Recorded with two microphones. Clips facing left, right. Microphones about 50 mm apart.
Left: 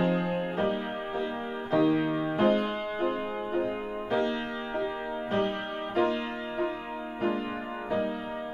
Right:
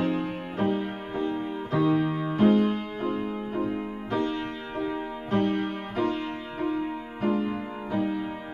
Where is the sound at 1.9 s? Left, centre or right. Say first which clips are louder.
Right 1 dB; centre.